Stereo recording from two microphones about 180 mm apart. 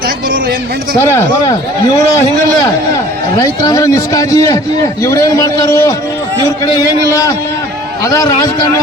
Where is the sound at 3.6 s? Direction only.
20° left (ahead or behind).